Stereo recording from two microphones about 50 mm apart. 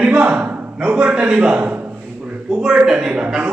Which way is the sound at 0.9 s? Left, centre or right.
Right.